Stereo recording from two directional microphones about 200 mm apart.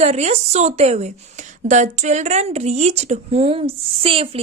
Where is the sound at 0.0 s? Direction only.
35° right (ahead or behind).